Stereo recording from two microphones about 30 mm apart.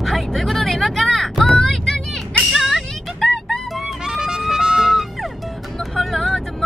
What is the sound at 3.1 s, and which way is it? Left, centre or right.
Music, centre.